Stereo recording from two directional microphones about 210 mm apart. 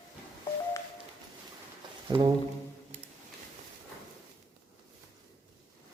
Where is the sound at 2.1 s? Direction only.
20° right (ahead or behind).